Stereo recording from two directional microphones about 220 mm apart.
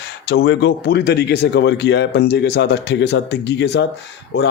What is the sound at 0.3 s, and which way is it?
Speech, 50° left (ahead or behind).